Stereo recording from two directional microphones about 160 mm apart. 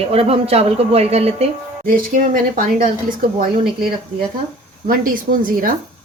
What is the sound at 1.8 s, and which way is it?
Speech, 65° right (ahead or behind).